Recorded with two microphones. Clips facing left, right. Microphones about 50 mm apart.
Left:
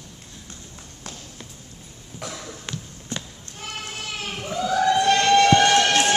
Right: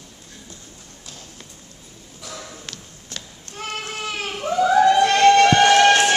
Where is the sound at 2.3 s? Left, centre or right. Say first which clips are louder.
Even; centre.